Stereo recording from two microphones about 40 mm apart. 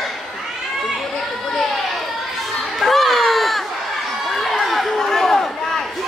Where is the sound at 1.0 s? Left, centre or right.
Centre.